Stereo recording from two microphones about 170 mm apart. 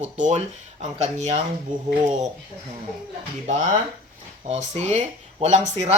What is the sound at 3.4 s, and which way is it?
Speech, 45° right (ahead or behind).